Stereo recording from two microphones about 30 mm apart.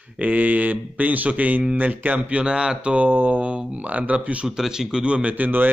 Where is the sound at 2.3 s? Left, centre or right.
Right.